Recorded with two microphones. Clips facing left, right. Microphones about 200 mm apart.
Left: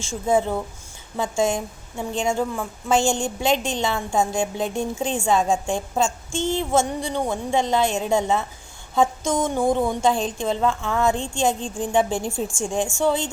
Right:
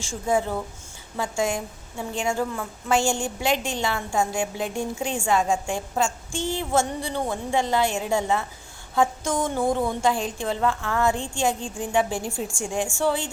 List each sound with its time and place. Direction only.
0.0 s a woman's voice: 20° left (ahead or behind)